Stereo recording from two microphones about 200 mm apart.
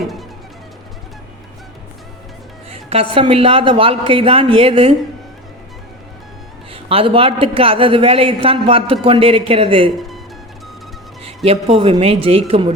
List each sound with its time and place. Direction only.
2.6 s a woman's voice: 30° right (ahead or behind)
6.7 s a woman's voice: 30° right (ahead or behind)
11.4 s a woman's voice: 30° right (ahead or behind)